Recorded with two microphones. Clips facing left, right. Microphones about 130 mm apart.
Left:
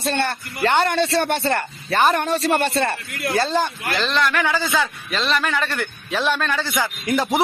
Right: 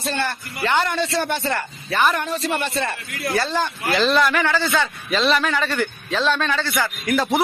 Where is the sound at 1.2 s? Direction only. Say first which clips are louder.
Left 2 dB; 65° left (ahead or behind).